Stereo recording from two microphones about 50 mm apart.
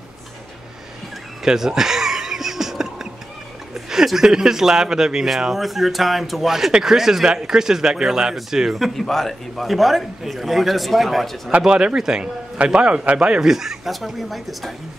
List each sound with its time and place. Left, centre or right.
1.4 s a sound: centre
3.7 s a man's voice: centre
11.6 s speech: centre